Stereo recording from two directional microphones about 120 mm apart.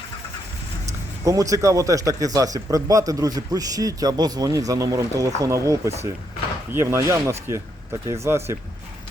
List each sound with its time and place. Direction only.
1.2 s speech: 30° right (ahead or behind)